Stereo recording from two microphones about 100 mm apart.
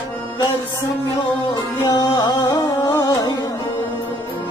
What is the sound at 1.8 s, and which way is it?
Music, 40° left (ahead or behind).